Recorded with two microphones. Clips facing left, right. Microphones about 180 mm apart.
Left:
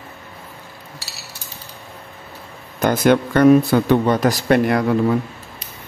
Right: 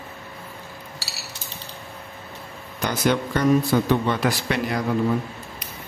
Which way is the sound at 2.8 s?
55° left (ahead or behind).